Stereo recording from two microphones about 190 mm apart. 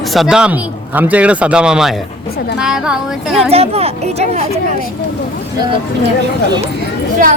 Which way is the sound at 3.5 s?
30° right (ahead or behind).